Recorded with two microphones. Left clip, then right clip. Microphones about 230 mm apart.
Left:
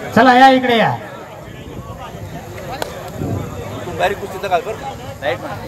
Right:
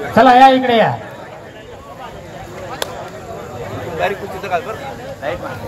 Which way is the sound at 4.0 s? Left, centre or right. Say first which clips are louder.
Left 2 dB; left.